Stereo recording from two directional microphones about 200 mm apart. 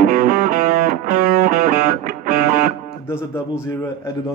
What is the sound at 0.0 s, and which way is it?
Music, 45° right (ahead or behind).